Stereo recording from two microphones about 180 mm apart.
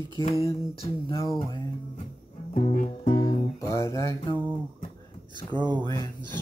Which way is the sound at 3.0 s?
30° left (ahead or behind).